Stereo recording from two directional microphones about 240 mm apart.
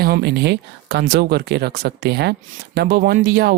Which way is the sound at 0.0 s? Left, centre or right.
Right.